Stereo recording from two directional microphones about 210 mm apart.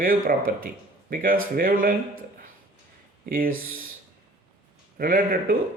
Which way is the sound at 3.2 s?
40° right (ahead or behind).